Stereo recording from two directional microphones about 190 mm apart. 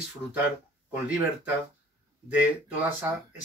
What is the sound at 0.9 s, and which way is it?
Speech, 10° right (ahead or behind).